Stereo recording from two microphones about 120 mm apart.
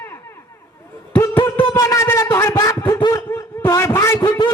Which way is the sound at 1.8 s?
25° left (ahead or behind).